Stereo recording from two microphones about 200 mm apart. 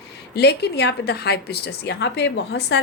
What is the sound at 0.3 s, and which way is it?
A woman's voice, 55° left (ahead or behind).